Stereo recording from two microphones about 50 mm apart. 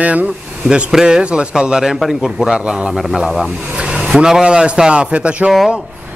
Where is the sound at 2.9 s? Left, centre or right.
Centre; by 5.5 s right.